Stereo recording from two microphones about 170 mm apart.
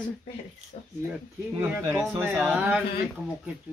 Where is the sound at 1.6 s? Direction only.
10° right (ahead or behind).